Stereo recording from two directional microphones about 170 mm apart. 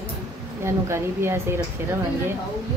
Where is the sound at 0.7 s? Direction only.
15° right (ahead or behind).